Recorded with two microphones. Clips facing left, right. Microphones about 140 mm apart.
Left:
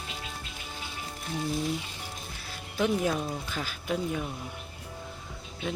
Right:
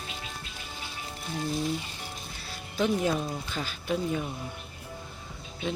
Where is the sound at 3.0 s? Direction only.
Centre (ahead or behind).